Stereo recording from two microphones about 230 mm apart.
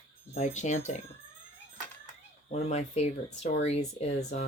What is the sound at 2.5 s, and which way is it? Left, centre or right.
Speech, left.